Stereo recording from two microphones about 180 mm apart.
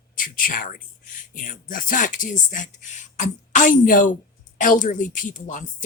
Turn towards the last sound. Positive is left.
turn(degrees=45)  # may be behind; listen again after turning